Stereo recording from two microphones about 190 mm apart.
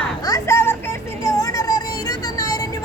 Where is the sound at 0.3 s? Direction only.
15° left (ahead or behind).